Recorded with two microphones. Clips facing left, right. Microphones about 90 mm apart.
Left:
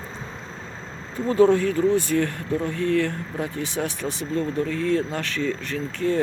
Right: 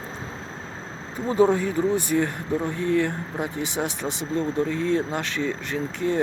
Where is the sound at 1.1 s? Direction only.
15° right (ahead or behind).